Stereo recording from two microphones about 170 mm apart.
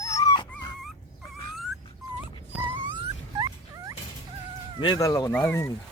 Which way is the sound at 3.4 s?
20° right (ahead or behind).